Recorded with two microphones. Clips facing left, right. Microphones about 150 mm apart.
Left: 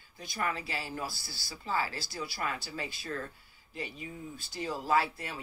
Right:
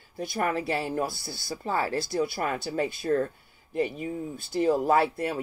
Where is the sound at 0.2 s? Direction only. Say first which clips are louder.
Right 7 dB; 55° right (ahead or behind).